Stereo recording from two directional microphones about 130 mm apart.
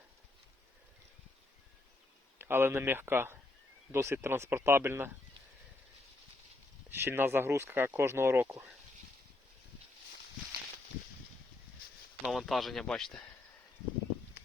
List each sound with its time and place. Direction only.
2.4 s speech: 15° right (ahead or behind)
6.9 s speech: 20° right (ahead or behind)
12.2 s speech: centre (ahead or behind)